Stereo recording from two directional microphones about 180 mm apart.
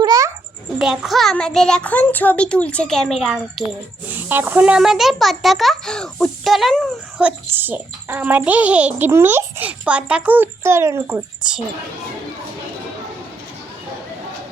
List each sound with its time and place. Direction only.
0.0 s a sound: 20° right (ahead or behind)
0.8 s a child's voice: centre (ahead or behind)
4.1 s a child's voice: 10° right (ahead or behind)